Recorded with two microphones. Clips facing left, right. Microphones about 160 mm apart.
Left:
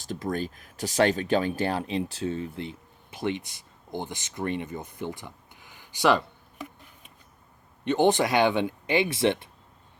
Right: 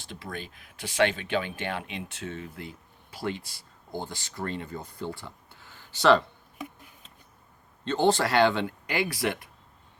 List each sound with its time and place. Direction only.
0.0 s speech: 40° left (ahead or behind); by 6.2 s 10° left (ahead or behind)
7.9 s speech: 15° left (ahead or behind)